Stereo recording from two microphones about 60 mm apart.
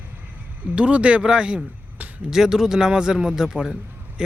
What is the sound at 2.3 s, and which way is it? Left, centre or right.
A man's voice, centre.